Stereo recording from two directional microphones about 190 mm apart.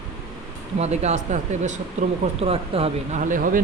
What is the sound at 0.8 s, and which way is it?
Speech, 35° right (ahead or behind).